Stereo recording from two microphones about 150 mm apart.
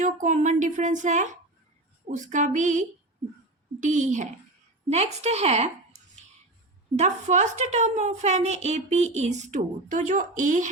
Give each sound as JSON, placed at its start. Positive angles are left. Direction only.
{"t": 0.0, "sound": "a woman's voice", "side_deg": -55}